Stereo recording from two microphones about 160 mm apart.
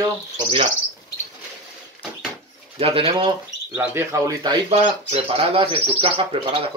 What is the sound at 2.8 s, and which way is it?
Speech, 35° right (ahead or behind).